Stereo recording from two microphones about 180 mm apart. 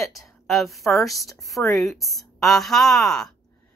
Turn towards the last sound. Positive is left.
turn(degrees=0)  # may be behind; listen again after turning